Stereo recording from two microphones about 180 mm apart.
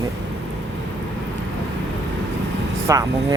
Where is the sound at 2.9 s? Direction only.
20° right (ahead or behind).